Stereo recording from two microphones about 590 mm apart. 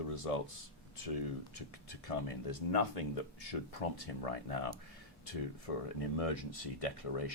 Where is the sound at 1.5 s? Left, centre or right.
Left.